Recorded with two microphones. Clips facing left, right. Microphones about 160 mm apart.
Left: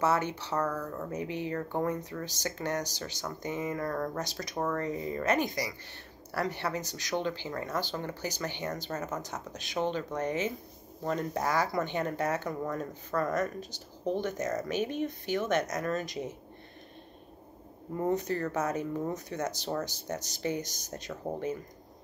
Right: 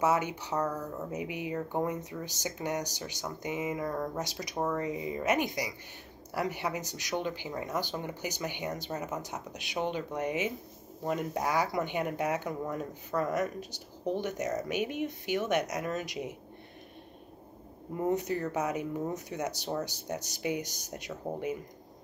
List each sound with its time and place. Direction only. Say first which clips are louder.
0.0 s speech: even; 15° right (ahead or behind)
17.9 s speech: even; 15° right (ahead or behind)